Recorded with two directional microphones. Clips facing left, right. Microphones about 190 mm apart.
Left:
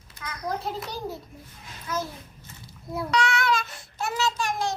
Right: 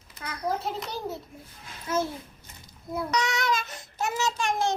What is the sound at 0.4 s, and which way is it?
Speech, centre (ahead or behind).